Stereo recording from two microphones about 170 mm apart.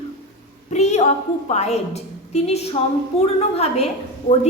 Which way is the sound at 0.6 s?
40° left (ahead or behind).